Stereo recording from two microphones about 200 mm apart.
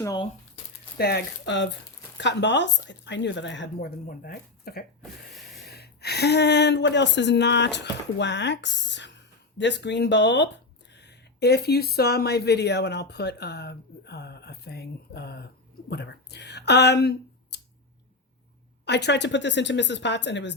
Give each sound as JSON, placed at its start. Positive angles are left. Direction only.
{"t": 0.0, "sound": "speech", "side_deg": 20}
{"t": 0.9, "sound": "speech", "side_deg": 55}
{"t": 18.9, "sound": "speech", "side_deg": 60}